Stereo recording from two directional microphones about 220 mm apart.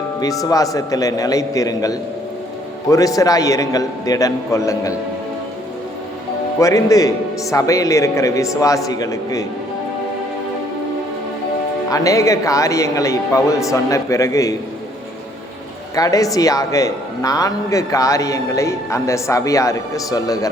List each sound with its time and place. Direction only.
0.2 s a man's voice: 15° left (ahead or behind)
6.6 s a man's voice: 15° left (ahead or behind)
11.9 s a man's voice: 15° left (ahead or behind)
16.0 s a man's voice: 15° left (ahead or behind)